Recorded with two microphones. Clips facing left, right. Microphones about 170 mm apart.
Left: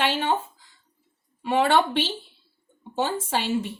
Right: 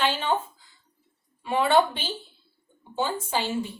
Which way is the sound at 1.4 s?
80° left.